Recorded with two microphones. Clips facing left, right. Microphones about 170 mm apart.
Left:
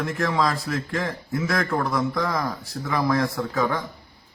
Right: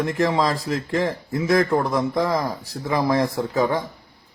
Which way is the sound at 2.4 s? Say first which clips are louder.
Right 2 dB; 35° right (ahead or behind).